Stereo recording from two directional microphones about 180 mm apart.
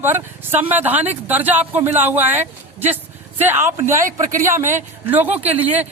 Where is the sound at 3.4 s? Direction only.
10° right (ahead or behind).